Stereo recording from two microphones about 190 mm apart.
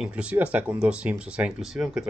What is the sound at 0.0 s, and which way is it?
Speech, 5° right (ahead or behind).